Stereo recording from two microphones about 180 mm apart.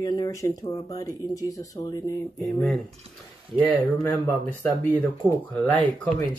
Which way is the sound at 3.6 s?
10° left (ahead or behind).